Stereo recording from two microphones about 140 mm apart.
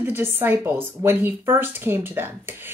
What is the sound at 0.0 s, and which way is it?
A woman's voice, 15° right (ahead or behind).